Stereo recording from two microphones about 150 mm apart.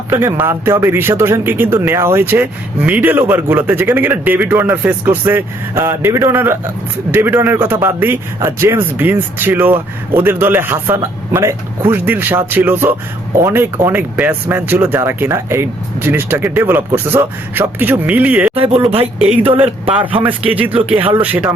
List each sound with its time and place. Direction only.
0.1 s a man's voice: 15° right (ahead or behind)
18.5 s speech: 40° right (ahead or behind)
20.5 s a man's voice: 10° right (ahead or behind)